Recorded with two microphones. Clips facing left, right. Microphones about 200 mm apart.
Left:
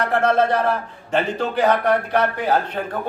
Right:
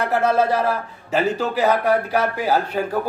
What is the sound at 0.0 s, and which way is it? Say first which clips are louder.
A man's voice: even; 5° right (ahead or behind).